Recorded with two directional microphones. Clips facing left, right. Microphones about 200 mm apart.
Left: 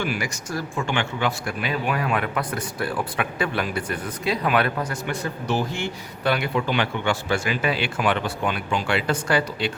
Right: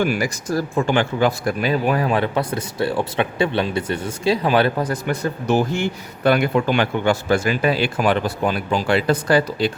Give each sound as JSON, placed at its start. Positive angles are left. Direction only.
{"t": 0.0, "sound": "speech", "side_deg": -45}